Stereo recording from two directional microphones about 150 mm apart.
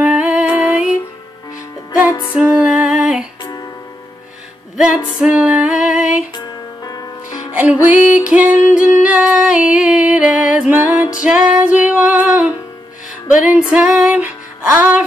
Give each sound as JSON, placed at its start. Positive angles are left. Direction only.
{"t": 0.0, "sound": "music", "side_deg": -10}
{"t": 2.3, "sound": "music", "side_deg": -5}
{"t": 3.4, "sound": "music", "side_deg": 25}
{"t": 4.7, "sound": "female singing", "side_deg": -5}
{"t": 6.3, "sound": "music", "side_deg": 30}
{"t": 7.5, "sound": "music", "side_deg": -10}
{"t": 8.0, "sound": "female singing", "side_deg": -10}
{"t": 8.6, "sound": "music", "side_deg": -5}